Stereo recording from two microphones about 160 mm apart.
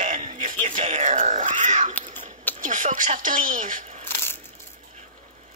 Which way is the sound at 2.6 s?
55° right (ahead or behind).